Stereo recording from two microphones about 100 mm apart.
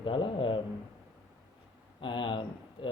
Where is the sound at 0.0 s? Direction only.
60° left (ahead or behind).